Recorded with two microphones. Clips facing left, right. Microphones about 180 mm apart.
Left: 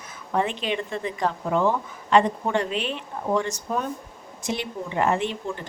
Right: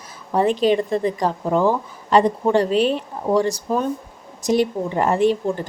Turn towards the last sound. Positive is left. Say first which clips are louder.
# right 9 dB
turn(degrees=-40)  # may be behind; listen again after turning